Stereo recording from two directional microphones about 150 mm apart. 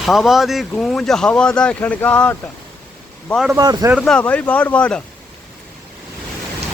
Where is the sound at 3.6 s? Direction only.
25° right (ahead or behind).